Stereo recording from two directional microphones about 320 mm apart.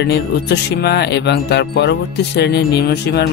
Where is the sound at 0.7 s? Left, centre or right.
Left.